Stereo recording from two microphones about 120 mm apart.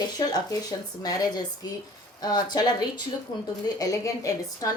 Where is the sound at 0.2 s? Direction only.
35° left (ahead or behind).